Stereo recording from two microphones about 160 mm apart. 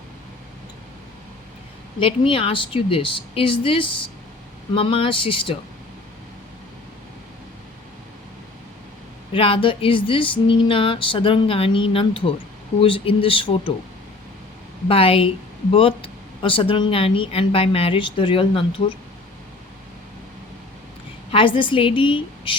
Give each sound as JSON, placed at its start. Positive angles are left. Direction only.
{"t": 2.0, "sound": "speech", "side_deg": 35}
{"t": 9.3, "sound": "speech", "side_deg": 35}
{"t": 14.8, "sound": "speech", "side_deg": 35}
{"t": 21.3, "sound": "speech", "side_deg": 30}